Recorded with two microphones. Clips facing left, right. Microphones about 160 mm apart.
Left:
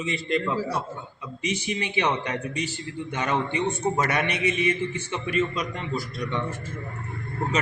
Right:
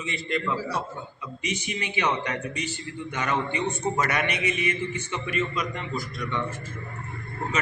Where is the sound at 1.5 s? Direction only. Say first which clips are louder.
Left 3 dB; 30° left (ahead or behind).